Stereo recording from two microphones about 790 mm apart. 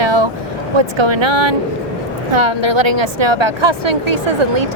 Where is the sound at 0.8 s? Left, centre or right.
Right.